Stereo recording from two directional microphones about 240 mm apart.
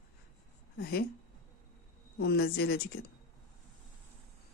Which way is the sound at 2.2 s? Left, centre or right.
Left.